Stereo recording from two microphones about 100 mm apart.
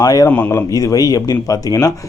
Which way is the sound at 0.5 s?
35° left (ahead or behind).